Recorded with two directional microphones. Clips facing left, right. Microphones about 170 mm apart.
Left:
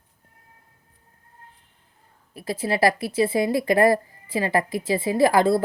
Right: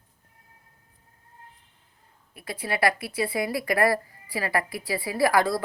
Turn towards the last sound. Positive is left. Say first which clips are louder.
# left 5 dB
turn(degrees=25)  # may be behind; listen again after turning